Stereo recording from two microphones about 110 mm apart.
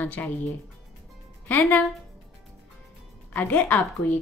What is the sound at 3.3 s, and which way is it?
Speech, 15° left (ahead or behind).